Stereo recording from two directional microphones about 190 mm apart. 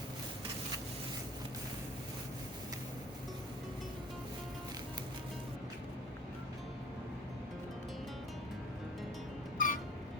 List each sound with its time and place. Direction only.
9.6 s music: 45° left (ahead or behind)